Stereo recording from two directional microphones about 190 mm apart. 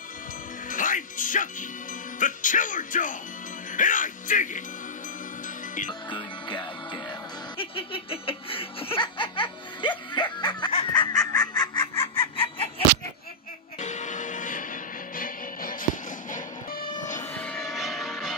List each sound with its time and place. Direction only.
0.7 s music: 45° left (ahead or behind)
2.1 s speech: 45° left (ahead or behind)
6.0 s music: 25° left (ahead or behind)
7.5 s laughter: 30° left (ahead or behind)
11.0 s fowl: 20° left (ahead or behind)
13.7 s music: 40° left (ahead or behind)
17.2 s music: 10° left (ahead or behind)